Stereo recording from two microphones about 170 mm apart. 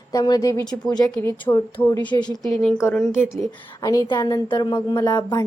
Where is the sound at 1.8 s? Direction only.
10° left (ahead or behind).